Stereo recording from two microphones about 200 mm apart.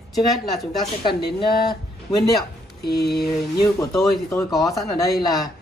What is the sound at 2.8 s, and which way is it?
Speech, 55° left (ahead or behind).